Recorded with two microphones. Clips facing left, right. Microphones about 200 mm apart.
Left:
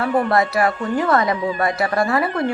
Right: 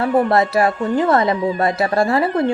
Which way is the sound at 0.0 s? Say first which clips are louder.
Right 3 dB; 25° right (ahead or behind).